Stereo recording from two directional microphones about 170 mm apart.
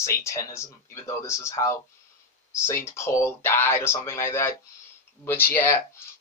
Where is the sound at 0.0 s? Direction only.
20° left (ahead or behind).